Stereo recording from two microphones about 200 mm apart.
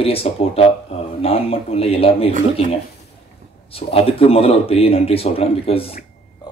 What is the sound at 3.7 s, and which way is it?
Speech, 30° left (ahead or behind).